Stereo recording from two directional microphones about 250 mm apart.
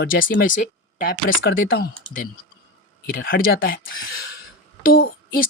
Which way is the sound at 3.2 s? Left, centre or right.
Left.